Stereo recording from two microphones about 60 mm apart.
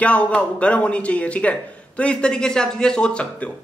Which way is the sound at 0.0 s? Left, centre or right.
Left.